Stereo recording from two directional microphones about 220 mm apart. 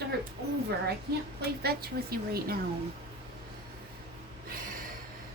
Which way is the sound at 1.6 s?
45° right (ahead or behind).